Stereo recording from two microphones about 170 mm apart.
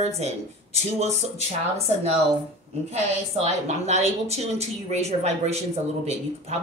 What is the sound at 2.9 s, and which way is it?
Speech, 40° right (ahead or behind).